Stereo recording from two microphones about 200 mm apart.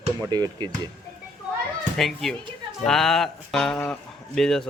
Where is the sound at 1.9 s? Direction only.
Centre (ahead or behind).